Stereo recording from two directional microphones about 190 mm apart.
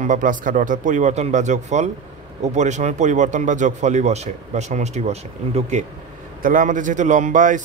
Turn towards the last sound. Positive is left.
turn(degrees=-40)  # may be behind; listen again after turning